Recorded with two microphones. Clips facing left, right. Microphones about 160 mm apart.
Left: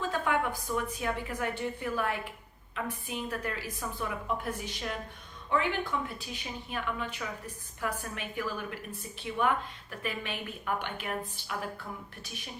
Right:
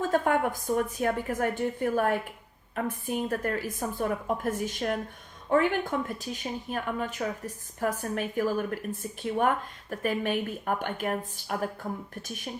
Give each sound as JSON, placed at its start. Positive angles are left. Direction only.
{"t": 0.0, "sound": "a woman's voice", "side_deg": -45}